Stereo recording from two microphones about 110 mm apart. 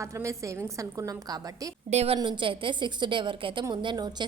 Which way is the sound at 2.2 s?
45° right (ahead or behind).